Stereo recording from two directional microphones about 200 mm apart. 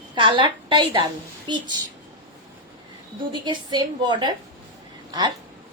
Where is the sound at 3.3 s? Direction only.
25° right (ahead or behind).